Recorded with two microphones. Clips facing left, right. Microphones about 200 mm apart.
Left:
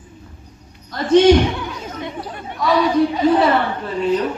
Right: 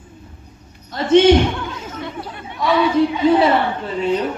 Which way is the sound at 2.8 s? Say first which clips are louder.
Right 1 dB; 40° left (ahead or behind).